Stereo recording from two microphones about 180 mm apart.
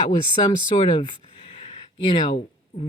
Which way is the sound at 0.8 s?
30° left (ahead or behind).